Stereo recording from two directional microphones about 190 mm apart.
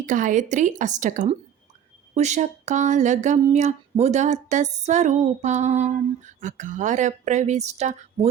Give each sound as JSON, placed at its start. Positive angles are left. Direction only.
{"t": 0.0, "sound": "speech", "side_deg": -40}